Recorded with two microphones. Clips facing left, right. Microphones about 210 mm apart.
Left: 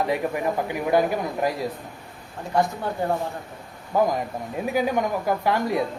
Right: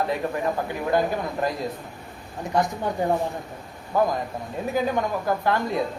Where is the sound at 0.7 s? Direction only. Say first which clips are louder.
Left 3 dB; 10° left (ahead or behind).